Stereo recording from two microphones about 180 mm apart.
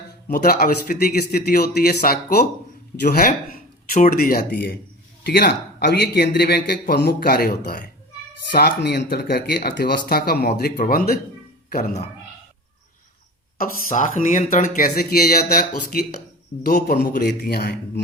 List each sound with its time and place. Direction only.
0.3 s a man's voice: 55° left (ahead or behind)
8.8 s a man's voice: 65° left (ahead or behind)
13.8 s a man's voice: 45° left (ahead or behind); by 18.0 s 60° left (ahead or behind)